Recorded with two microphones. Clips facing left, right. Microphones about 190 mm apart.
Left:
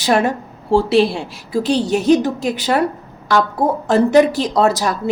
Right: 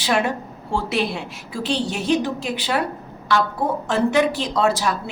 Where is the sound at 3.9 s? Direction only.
40° left (ahead or behind).